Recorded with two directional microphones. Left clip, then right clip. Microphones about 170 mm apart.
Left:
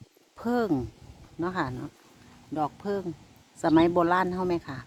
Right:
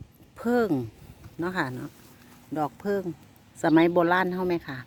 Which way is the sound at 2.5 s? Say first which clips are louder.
Right 2 dB; 25° right (ahead or behind).